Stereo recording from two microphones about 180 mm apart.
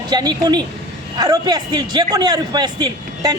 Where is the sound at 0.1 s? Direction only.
25° right (ahead or behind).